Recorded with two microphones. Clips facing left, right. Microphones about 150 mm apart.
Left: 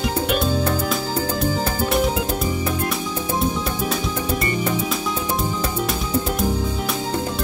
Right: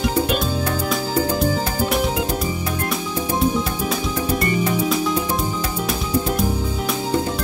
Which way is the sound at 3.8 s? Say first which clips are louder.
Right 1 dB; centre (ahead or behind).